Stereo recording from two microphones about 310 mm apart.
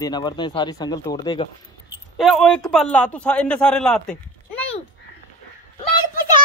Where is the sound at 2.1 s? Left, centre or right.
Centre.